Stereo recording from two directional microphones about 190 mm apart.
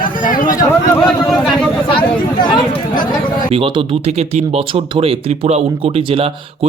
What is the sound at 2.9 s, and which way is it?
Chatter, 45° left (ahead or behind).